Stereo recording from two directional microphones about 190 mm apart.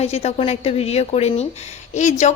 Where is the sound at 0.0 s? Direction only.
35° left (ahead or behind).